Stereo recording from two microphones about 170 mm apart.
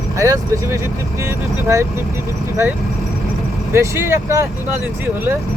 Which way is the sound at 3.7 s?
15° right (ahead or behind).